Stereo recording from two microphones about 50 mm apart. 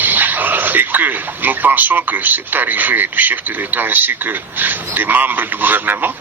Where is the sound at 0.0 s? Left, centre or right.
Right.